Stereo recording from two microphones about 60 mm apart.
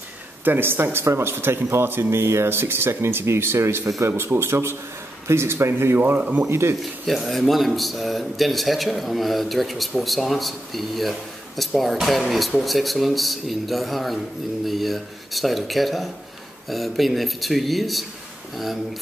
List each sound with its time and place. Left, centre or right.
0.5 s speech: right
5.9 s speech: right
6.5 s speech: right
6.8 s speech: centre